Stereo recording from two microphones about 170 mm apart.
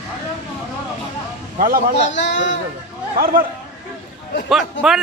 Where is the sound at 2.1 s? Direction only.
90° left.